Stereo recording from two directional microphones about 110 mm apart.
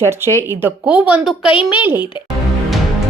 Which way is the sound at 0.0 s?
20° right (ahead or behind).